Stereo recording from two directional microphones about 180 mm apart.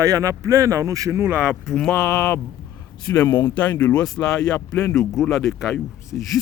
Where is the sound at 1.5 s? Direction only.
5° left (ahead or behind).